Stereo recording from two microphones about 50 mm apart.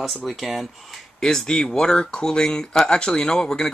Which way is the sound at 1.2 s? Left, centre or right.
Centre.